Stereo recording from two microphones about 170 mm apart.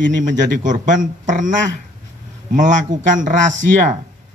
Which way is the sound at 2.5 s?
50° right (ahead or behind).